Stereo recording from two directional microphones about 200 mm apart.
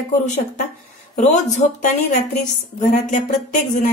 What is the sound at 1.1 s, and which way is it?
Speech, 35° left (ahead or behind).